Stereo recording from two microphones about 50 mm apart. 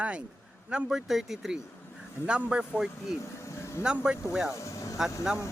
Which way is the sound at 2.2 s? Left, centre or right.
Centre.